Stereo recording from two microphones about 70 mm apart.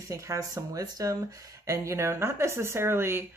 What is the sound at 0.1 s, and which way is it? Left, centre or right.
Speech, right.